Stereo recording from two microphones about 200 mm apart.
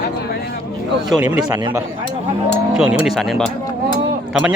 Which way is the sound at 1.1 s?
5° right (ahead or behind).